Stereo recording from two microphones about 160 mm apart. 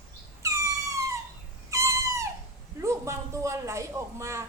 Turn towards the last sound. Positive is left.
turn(degrees=-20)  # may be behind; listen again after turning